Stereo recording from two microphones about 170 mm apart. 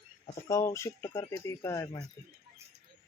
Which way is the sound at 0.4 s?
20° left (ahead or behind).